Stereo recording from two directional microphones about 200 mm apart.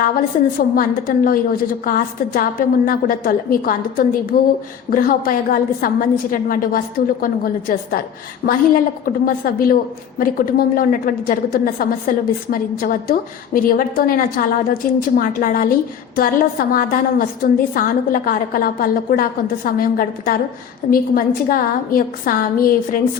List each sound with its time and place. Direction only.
0.3 s a woman's voice: 45° left (ahead or behind)